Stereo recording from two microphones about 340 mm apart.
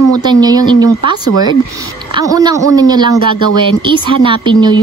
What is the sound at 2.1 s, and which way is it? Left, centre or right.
Speech, centre.